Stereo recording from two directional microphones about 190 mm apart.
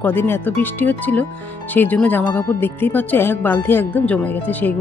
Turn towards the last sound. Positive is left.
turn(degrees=10)  # may be behind; listen again after turning